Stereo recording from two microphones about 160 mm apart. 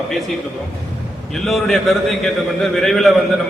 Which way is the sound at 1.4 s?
Centre (ahead or behind).